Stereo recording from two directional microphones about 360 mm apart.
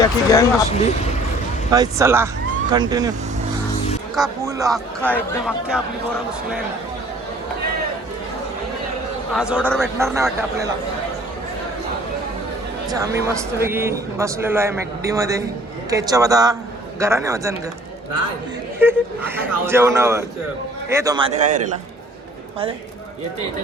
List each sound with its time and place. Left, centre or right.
0.0 s speech: centre
1.7 s a man's voice: centre
9.3 s speech: centre
12.9 s a man's voice: centre
18.8 s a man's voice: centre